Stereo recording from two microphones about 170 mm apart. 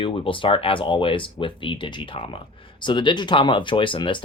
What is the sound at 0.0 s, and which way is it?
Speech, 30° left (ahead or behind).